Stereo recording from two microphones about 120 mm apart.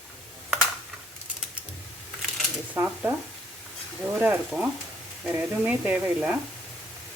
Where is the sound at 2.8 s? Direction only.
15° right (ahead or behind).